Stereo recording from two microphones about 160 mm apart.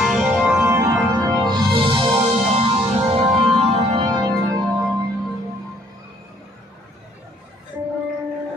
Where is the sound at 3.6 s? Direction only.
35° right (ahead or behind).